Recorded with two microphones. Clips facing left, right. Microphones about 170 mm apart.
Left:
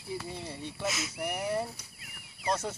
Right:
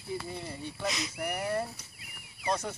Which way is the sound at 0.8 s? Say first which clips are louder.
Even; 5° left (ahead or behind).